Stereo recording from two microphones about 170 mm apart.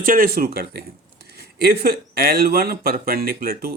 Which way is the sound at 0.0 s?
55° right (ahead or behind).